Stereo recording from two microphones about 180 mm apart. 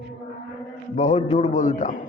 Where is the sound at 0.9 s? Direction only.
40° left (ahead or behind).